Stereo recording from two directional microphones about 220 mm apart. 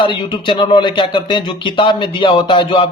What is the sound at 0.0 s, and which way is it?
A man's voice, 20° left (ahead or behind).